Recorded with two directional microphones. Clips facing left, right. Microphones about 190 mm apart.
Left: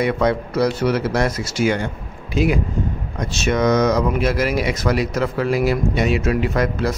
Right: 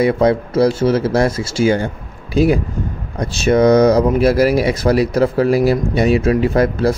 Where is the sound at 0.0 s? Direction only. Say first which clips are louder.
Right 5 dB; 30° right (ahead or behind).